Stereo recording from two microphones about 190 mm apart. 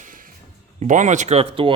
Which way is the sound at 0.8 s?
40° right (ahead or behind).